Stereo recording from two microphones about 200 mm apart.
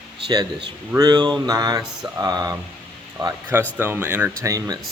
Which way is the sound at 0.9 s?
20° right (ahead or behind).